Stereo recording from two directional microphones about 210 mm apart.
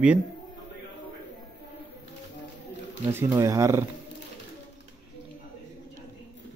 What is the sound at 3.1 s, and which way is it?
Speech, 10° right (ahead or behind).